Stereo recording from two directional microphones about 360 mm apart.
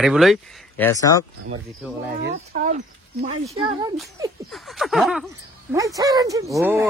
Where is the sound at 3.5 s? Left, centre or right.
Centre.